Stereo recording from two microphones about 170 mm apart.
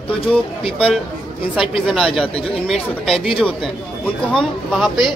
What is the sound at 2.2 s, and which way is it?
Speech, 35° left (ahead or behind).